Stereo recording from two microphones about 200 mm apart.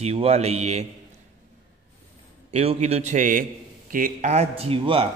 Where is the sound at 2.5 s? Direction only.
30° right (ahead or behind).